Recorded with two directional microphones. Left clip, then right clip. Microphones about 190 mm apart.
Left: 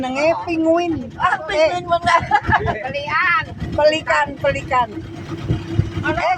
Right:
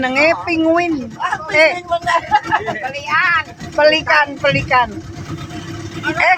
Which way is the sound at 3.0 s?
45° right (ahead or behind).